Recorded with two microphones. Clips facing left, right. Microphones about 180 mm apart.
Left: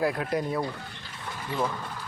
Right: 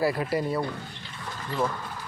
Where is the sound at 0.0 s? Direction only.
5° right (ahead or behind).